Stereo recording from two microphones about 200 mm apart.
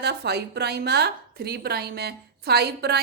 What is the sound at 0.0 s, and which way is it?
A woman's voice, 55° right (ahead or behind).